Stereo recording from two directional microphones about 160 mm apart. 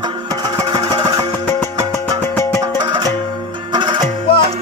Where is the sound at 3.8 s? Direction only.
30° right (ahead or behind).